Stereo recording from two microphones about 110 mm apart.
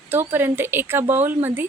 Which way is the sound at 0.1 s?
20° right (ahead or behind).